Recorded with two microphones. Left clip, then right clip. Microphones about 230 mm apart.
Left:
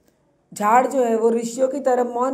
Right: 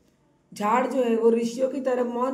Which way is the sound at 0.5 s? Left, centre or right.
Centre.